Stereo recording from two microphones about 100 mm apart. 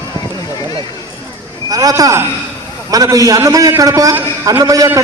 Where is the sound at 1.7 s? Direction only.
35° right (ahead or behind).